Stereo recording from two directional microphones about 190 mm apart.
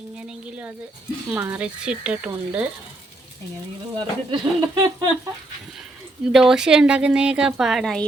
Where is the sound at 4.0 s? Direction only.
25° right (ahead or behind).